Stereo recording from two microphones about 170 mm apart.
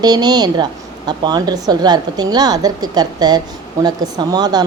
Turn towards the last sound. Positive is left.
turn(degrees=-25)  # may be behind; listen again after turning